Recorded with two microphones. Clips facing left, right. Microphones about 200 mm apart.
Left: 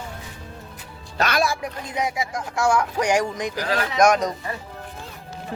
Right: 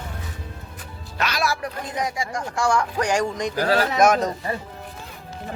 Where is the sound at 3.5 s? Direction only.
40° right (ahead or behind).